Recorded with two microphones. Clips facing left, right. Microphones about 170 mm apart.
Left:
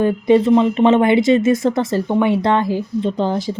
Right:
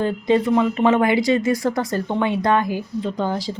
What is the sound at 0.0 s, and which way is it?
Speech, 15° left (ahead or behind).